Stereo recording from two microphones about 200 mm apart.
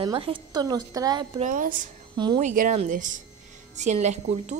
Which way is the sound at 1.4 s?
40° right (ahead or behind).